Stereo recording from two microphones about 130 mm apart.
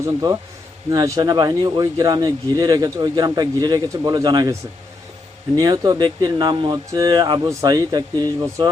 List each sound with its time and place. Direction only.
0.0 s speech: 30° right (ahead or behind)
5.5 s speech: 30° right (ahead or behind)